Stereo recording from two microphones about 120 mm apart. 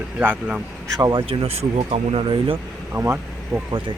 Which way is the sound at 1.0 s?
35° right (ahead or behind).